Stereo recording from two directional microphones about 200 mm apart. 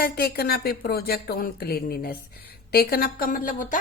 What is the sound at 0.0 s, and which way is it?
A woman's voice, 50° left (ahead or behind).